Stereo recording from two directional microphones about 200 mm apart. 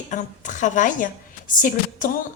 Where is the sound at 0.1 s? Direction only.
40° left (ahead or behind).